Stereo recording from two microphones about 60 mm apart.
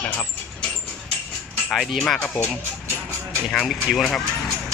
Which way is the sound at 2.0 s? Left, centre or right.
Centre.